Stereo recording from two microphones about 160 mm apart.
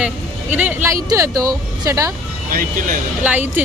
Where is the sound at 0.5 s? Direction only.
10° right (ahead or behind).